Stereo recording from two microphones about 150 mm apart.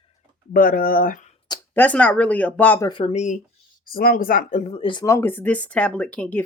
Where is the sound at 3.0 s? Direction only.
50° left (ahead or behind).